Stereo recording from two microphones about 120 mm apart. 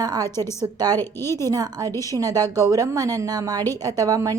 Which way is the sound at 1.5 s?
30° right (ahead or behind).